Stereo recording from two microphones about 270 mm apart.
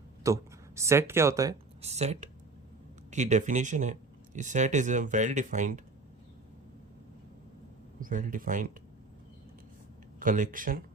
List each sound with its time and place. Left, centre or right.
0.2 s speech: centre
1.8 s speech: right
8.0 s speech: right
10.2 s speech: right